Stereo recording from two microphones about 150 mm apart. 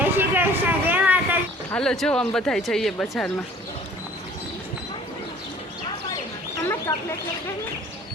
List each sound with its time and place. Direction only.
0.0 s a sound: 15° right (ahead or behind)
1.7 s speech: 5° left (ahead or behind)
6.9 s speech: 20° left (ahead or behind)